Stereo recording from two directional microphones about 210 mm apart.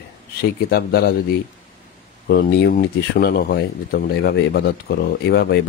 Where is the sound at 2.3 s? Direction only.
50° left (ahead or behind).